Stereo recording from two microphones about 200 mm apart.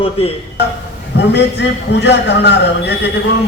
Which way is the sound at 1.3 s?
60° left (ahead or behind).